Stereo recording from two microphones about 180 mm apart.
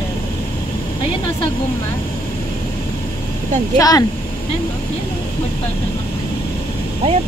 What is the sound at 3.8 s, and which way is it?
Speech, 20° left (ahead or behind).